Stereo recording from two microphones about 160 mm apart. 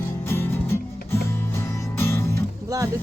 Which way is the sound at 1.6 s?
15° left (ahead or behind).